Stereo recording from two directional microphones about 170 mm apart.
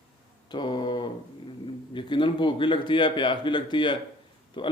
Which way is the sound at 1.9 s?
30° left (ahead or behind).